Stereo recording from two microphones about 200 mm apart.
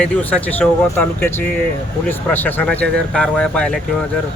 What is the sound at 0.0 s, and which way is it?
Speech, 5° left (ahead or behind).